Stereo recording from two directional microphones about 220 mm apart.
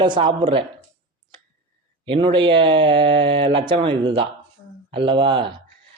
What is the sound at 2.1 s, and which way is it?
Speech, 25° right (ahead or behind).